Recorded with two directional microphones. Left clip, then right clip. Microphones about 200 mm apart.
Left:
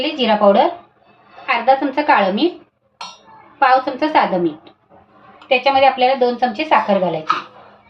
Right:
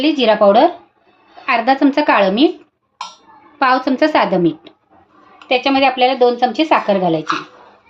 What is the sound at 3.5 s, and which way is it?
Speech, 55° right (ahead or behind).